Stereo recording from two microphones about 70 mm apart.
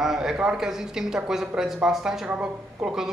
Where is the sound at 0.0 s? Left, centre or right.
Centre.